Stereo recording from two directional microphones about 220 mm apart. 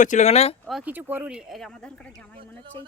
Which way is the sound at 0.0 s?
35° left (ahead or behind).